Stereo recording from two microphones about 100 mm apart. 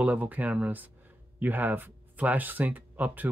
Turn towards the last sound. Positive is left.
turn(degrees=-15)  # may be behind; listen again after turning